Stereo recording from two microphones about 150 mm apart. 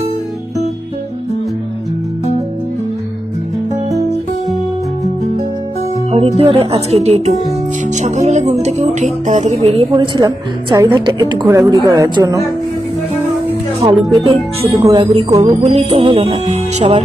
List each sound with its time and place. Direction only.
6.1 s speech: 40° right (ahead or behind)
9.9 s a woman's voice: 30° right (ahead or behind)
13.8 s speech: 25° right (ahead or behind)
15.6 s speech: 45° right (ahead or behind)